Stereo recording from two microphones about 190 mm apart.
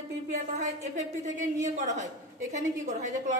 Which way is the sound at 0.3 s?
35° right (ahead or behind).